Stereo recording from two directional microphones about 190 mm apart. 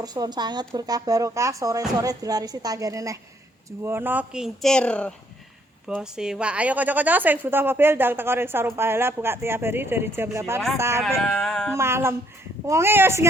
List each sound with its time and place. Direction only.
0.0 s a woman's voice: 20° right (ahead or behind)
11.4 s music: 5° left (ahead or behind)
11.7 s a woman's voice: 15° right (ahead or behind)